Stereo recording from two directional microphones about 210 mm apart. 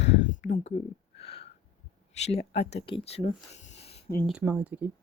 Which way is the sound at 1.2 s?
25° left (ahead or behind).